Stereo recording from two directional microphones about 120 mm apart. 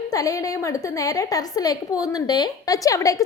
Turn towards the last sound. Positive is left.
turn(degrees=30)  # may be behind; listen again after turning